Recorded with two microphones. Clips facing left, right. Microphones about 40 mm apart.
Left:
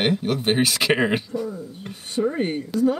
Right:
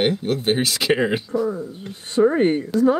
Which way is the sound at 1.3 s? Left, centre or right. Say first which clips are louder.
Right 6 dB; right.